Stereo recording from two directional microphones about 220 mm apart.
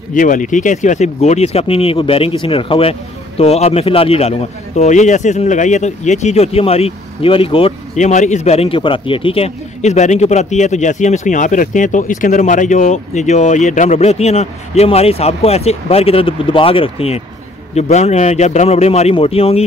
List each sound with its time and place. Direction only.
0.1 s speech: 35° left (ahead or behind)